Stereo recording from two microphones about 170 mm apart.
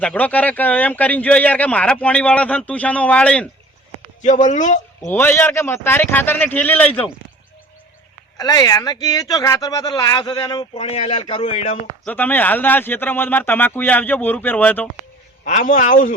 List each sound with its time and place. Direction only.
0.0 s speech: 10° left (ahead or behind)
4.2 s a man's voice: 45° left (ahead or behind)
5.0 s speech: 15° left (ahead or behind)
8.4 s speech: 20° left (ahead or behind); by 11.8 s 40° left (ahead or behind)
12.0 s speech: 10° left (ahead or behind)
15.4 s a man's voice: 50° left (ahead or behind)